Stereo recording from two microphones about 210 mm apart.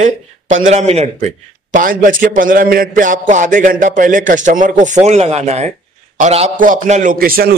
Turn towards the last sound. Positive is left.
turn(degrees=-45)  # may be behind; listen again after turning